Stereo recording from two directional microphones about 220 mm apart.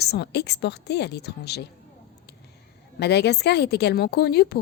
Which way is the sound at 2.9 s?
50° left (ahead or behind).